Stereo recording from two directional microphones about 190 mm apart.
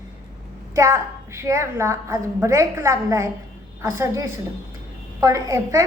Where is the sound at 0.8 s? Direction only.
15° right (ahead or behind).